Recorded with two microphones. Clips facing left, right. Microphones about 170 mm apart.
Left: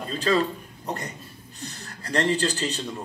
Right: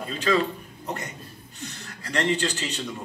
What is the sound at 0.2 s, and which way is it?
A man's voice, 35° left (ahead or behind).